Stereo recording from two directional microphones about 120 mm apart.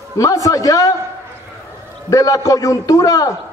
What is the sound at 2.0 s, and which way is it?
A man's voice, 30° left (ahead or behind).